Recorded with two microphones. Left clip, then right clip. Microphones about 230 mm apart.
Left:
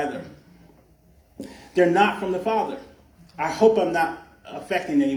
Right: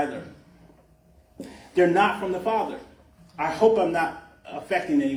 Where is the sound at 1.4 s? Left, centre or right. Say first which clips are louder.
Left 1 dB; left.